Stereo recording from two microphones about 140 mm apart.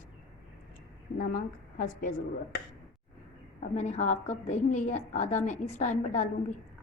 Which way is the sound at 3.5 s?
50° left (ahead or behind).